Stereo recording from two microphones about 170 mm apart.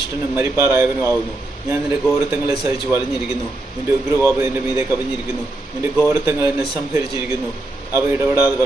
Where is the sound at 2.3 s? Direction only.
15° right (ahead or behind).